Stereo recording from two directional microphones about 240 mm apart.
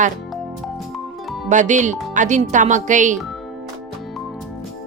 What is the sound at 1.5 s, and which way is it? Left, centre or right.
Speech, right.